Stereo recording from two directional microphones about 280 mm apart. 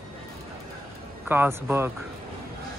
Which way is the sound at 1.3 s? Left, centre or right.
Centre.